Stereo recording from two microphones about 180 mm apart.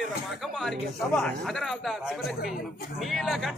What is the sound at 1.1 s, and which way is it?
A man's voice, centre (ahead or behind).